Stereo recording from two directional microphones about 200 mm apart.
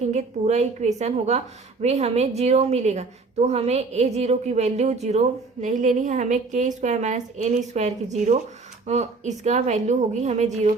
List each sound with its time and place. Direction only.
0.0 s a woman's voice: 35° right (ahead or behind)